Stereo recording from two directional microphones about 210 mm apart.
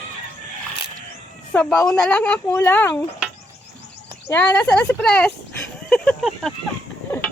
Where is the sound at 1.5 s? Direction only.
5° left (ahead or behind).